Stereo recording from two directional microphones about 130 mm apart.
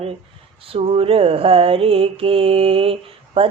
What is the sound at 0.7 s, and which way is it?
Mantra, 45° right (ahead or behind).